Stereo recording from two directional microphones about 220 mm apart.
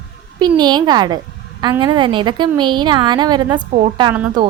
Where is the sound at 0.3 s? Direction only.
20° right (ahead or behind).